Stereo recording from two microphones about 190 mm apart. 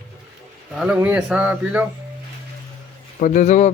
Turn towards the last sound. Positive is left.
turn(degrees=35)  # may be behind; listen again after turning